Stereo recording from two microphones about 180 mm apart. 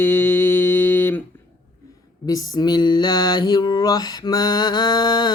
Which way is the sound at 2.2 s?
20° left (ahead or behind).